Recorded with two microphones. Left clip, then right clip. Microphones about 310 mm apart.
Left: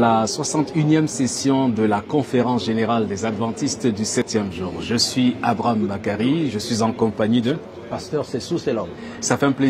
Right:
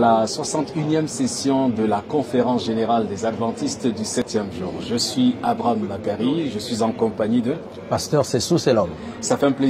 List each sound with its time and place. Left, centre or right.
0.0 s speech: left
7.9 s speech: right
9.3 s speech: left